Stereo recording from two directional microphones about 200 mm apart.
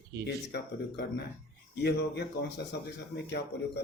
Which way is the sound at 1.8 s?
55° left (ahead or behind).